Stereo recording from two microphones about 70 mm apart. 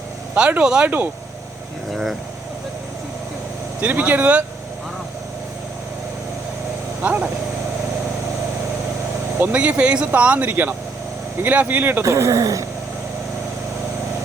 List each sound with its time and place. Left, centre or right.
0.3 s speech: centre
0.9 s speech: right
1.9 s vehicle: centre
3.8 s speech: right
7.0 s speech: right
9.4 s speech: right
12.0 s speech: right